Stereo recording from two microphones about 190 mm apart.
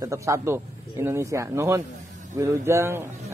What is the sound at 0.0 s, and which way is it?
Speech, 15° right (ahead or behind).